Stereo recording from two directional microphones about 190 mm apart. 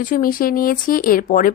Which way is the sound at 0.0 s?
45° left (ahead or behind).